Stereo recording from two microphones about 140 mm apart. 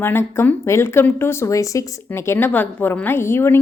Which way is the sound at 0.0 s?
15° left (ahead or behind).